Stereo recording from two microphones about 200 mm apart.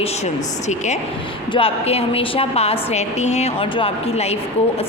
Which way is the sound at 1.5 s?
30° left (ahead or behind).